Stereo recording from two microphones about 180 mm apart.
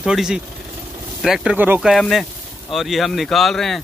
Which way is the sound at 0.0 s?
5° right (ahead or behind).